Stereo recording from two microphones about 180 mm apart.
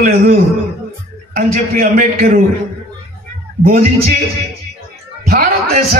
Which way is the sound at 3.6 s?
50° right (ahead or behind).